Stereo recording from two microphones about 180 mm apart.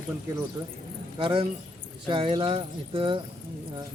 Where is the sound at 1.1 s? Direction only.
30° right (ahead or behind).